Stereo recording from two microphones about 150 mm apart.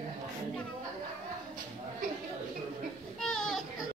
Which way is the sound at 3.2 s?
Centre (ahead or behind).